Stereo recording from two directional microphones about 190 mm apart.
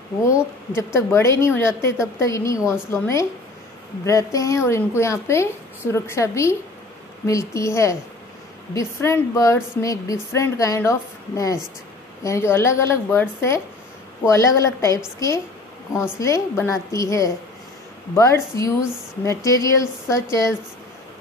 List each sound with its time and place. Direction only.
0.7 s a woman's voice: 15° left (ahead or behind)